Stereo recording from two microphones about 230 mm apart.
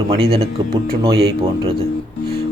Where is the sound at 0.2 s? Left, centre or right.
Right.